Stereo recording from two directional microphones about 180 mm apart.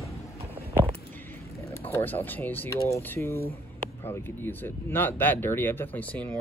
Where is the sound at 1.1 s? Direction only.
10° left (ahead or behind).